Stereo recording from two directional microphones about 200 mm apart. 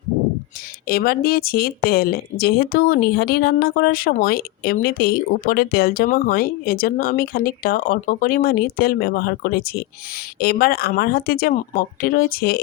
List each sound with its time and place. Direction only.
0.9 s speech: 50° left (ahead or behind)